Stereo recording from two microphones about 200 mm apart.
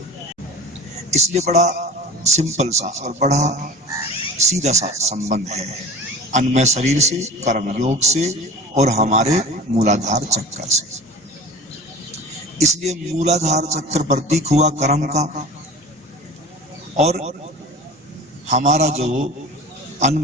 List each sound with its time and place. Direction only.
1.1 s a man's voice: 35° right (ahead or behind)
12.5 s a man's voice: 35° right (ahead or behind)
17.0 s a man's voice: 30° right (ahead or behind)
18.4 s a man's voice: 35° right (ahead or behind)